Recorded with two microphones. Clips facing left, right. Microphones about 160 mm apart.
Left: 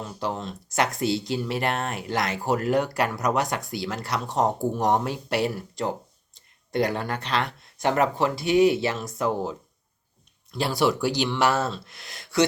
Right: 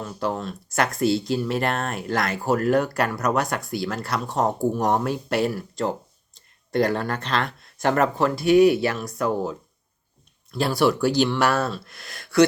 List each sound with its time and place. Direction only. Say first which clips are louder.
0.0 s speech: right 3 dB; 20° left (ahead or behind)
6.3 s a sound: right 3 dB; 15° left (ahead or behind)
7.1 s speech: right 2 dB; 15° left (ahead or behind)